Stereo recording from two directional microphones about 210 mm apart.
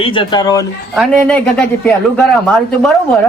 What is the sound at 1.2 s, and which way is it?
Speech, 5° left (ahead or behind).